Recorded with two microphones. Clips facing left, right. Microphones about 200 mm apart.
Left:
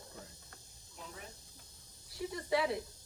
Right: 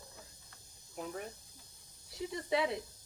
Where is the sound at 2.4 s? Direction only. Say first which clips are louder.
Even; 20° right (ahead or behind).